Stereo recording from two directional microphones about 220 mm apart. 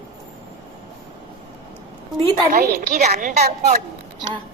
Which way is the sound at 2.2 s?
35° right (ahead or behind).